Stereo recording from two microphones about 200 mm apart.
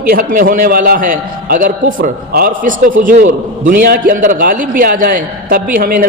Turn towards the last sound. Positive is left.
turn(degrees=-45)  # may be behind; listen again after turning